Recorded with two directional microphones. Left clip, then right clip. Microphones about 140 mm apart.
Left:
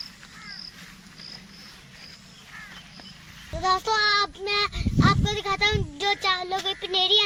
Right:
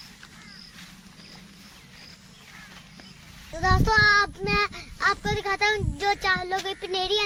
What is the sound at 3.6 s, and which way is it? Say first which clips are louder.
Child singing: right 2 dB; 5° right (ahead or behind).